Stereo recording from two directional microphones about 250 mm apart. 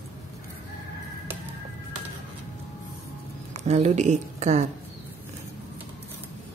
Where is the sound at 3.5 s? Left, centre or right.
Right.